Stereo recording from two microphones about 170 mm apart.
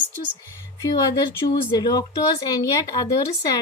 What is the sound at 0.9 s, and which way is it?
A woman's voice, 25° left (ahead or behind).